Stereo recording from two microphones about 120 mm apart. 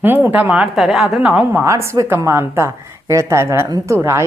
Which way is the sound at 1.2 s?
15° right (ahead or behind).